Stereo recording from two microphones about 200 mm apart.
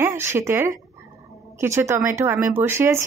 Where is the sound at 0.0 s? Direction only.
10° right (ahead or behind).